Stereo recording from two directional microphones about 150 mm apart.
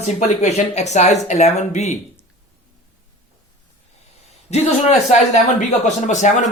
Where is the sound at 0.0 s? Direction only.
50° left (ahead or behind).